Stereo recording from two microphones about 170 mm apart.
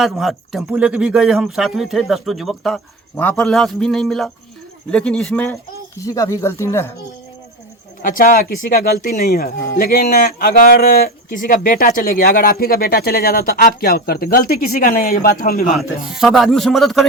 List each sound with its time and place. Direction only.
0.0 s speech: centre (ahead or behind); by 6.9 s 15° left (ahead or behind)
8.0 s speech: 55° left (ahead or behind)
15.7 s speech: centre (ahead or behind)